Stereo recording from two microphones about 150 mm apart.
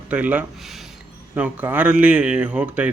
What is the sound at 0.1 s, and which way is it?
Speech, 10° right (ahead or behind).